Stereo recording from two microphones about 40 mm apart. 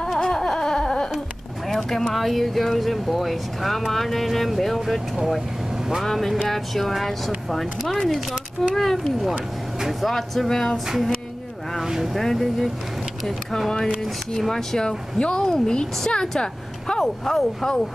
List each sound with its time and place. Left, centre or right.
0.0 s a sound: centre
1.7 s speech: centre
11.8 s speech: centre
12.1 s speech: centre; by 17.0 s left
17.2 s speech: centre